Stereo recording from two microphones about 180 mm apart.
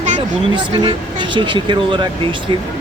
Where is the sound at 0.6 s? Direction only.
25° right (ahead or behind).